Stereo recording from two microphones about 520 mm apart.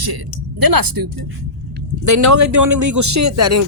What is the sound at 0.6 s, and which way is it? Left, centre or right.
Speech, right.